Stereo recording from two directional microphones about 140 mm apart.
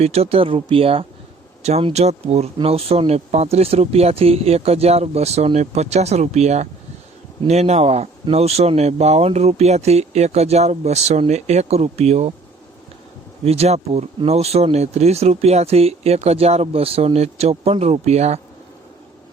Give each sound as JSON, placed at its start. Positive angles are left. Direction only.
{"t": 0.0, "sound": "speech", "side_deg": -45}
{"t": 13.4, "sound": "speech", "side_deg": -45}